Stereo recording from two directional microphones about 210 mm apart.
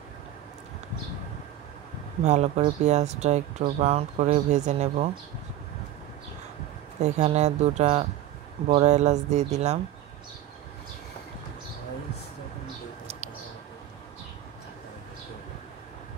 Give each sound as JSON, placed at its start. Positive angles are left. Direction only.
{"t": 2.2, "sound": "speech", "side_deg": -30}
{"t": 7.0, "sound": "speech", "side_deg": -30}